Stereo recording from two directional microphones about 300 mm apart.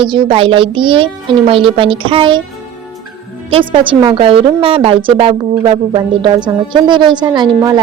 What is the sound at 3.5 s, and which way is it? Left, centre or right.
A woman's voice, centre.